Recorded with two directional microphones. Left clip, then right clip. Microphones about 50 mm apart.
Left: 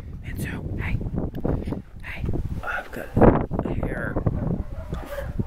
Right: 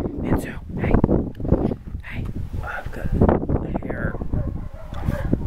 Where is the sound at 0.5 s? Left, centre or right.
Centre.